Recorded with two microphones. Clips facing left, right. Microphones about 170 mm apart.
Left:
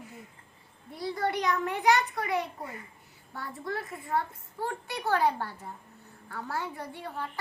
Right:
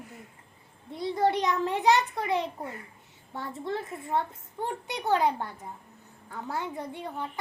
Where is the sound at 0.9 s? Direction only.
25° right (ahead or behind).